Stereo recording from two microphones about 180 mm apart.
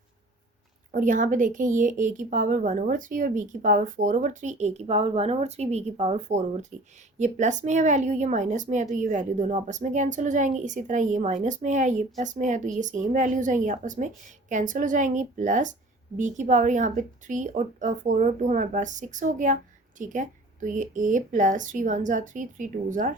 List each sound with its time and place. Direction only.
0.9 s a woman's voice: 45° right (ahead or behind)